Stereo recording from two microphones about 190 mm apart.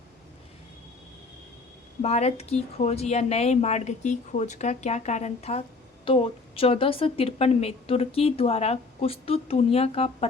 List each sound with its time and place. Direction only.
2.0 s a woman's voice: 35° left (ahead or behind)